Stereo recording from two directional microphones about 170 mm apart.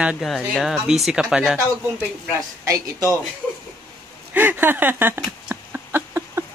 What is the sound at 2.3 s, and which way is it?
Speech, 20° right (ahead or behind).